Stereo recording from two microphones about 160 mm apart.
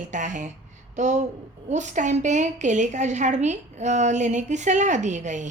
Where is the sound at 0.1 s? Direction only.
50° right (ahead or behind).